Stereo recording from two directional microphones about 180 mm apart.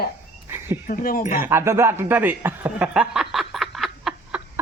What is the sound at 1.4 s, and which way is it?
Speech, 15° right (ahead or behind).